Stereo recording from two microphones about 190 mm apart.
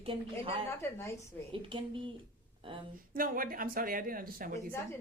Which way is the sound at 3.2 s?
45° right (ahead or behind).